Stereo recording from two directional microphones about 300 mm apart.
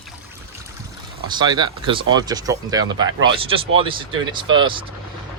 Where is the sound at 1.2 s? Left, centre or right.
Centre.